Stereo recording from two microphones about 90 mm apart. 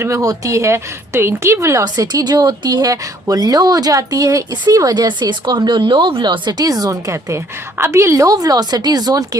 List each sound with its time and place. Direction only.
0.0 s a woman's voice: 35° right (ahead or behind)
1.8 s speech: 45° right (ahead or behind)